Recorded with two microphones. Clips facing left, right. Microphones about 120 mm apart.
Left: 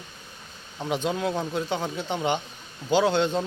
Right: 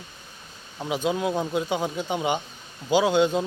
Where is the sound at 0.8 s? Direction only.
5° right (ahead or behind).